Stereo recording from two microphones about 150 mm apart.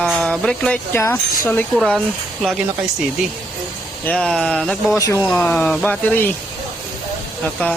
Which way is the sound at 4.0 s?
10° left (ahead or behind).